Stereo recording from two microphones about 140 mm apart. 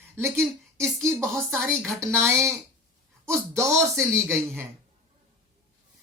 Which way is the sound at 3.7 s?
Centre (ahead or behind).